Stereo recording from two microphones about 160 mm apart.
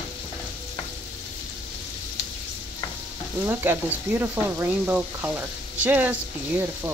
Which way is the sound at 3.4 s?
15° right (ahead or behind).